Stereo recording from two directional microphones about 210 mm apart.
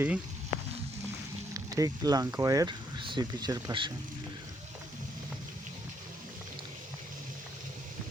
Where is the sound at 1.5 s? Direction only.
15° right (ahead or behind).